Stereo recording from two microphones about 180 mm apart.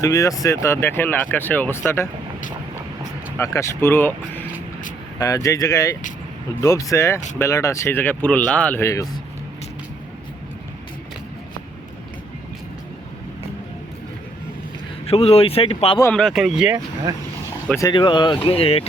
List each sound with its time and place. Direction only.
0.0 s speech: 20° left (ahead or behind)
3.3 s speech: 15° left (ahead or behind)
15.0 s speech: 35° left (ahead or behind)
16.1 s speech: centre (ahead or behind)
16.7 s speech: 20° right (ahead or behind)
17.7 s speech: 25° left (ahead or behind)